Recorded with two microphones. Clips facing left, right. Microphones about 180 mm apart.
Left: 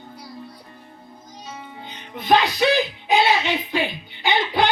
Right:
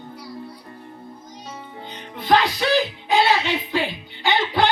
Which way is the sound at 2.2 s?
15° left (ahead or behind).